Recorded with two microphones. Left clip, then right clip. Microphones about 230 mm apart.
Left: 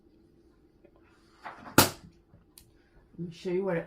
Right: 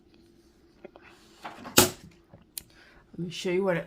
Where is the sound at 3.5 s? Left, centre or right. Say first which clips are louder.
Right 3 dB; right.